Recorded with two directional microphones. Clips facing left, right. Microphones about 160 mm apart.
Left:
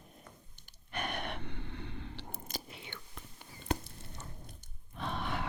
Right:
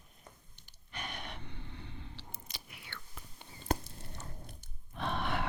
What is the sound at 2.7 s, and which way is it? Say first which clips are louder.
Whispering: left 3 dB; 20° left (ahead or behind).